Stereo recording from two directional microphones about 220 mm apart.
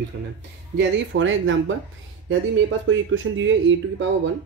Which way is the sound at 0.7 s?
60° right (ahead or behind).